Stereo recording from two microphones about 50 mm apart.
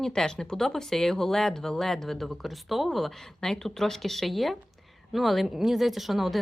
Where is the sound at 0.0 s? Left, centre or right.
Centre.